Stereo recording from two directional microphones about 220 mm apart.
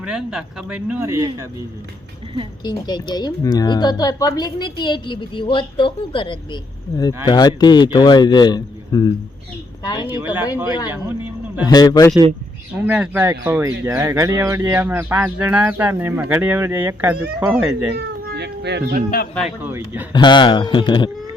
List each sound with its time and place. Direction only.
0.0 s speech: 5° right (ahead or behind)
2.6 s speech: 20° left (ahead or behind)
10.1 s speech: 10° right (ahead or behind)
10.7 s a man's voice: 20° left (ahead or behind)
12.8 s speech: 5° right (ahead or behind)
17.9 s speech: 50° right (ahead or behind)
19.6 s speech: 10° right (ahead or behind)
20.1 s speech: 20° left (ahead or behind)